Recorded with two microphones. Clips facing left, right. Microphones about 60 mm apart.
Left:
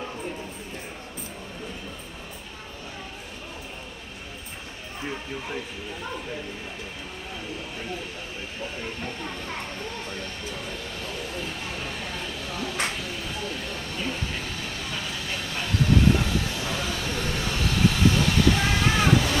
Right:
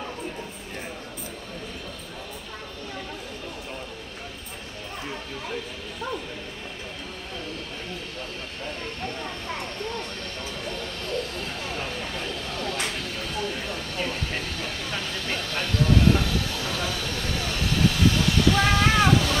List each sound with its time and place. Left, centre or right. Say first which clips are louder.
10.5 s speech: right 2 dB; centre
12.4 s a sound: left 3 dB; centre
14.0 s vehicle: even; centre
15.4 s speech: even; centre
16.2 s train: even; centre